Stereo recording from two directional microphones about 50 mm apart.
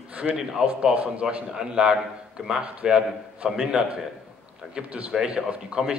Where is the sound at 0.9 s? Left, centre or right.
Right.